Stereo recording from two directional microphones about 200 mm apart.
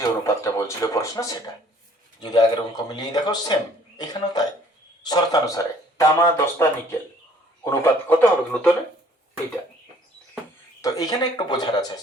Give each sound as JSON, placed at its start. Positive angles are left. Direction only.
{"t": 0.3, "sound": "a man's voice", "side_deg": 15}
{"t": 10.8, "sound": "a man's voice", "side_deg": 15}